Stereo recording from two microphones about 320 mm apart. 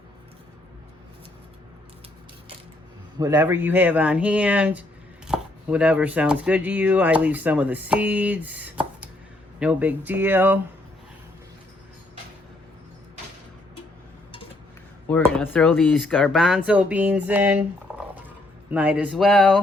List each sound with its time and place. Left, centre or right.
3.2 s speech: centre
15.4 s speech: centre